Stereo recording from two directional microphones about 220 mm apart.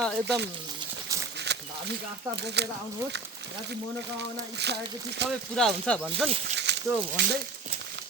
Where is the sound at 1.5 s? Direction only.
50° right (ahead or behind).